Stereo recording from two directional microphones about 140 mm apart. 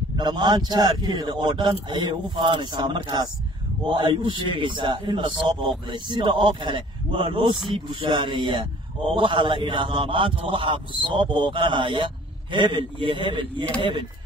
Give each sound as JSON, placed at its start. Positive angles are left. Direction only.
{"t": 0.2, "sound": "a man's voice", "side_deg": -30}